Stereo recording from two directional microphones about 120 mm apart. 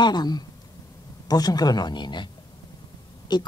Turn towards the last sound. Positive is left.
turn(degrees=35)  # may be behind; listen again after turning